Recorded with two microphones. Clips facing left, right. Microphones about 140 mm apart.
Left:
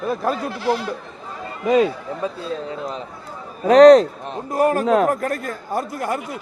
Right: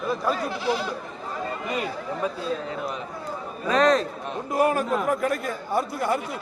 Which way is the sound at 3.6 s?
75° left (ahead or behind).